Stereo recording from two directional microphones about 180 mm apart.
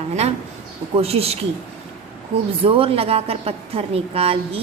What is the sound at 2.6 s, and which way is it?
A woman's voice, 30° right (ahead or behind).